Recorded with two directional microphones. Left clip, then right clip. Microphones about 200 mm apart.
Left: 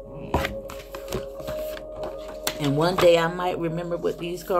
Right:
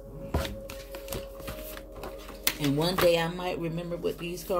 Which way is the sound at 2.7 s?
20° right (ahead or behind).